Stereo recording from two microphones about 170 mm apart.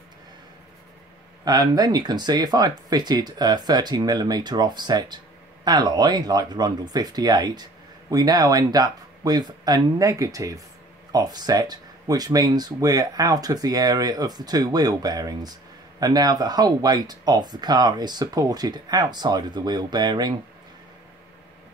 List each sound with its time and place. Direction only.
1.4 s speech: 25° right (ahead or behind)